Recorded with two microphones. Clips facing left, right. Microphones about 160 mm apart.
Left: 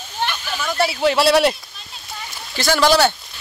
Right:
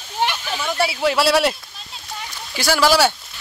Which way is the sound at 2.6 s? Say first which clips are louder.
Left 1 dB; 10° right (ahead or behind).